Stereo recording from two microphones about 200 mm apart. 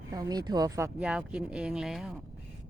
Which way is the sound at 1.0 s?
5° right (ahead or behind).